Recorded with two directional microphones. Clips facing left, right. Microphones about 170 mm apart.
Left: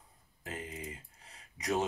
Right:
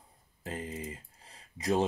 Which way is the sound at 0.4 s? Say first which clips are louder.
Right 4 dB; 30° right (ahead or behind).